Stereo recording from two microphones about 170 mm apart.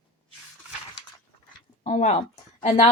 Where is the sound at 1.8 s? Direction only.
40° left (ahead or behind).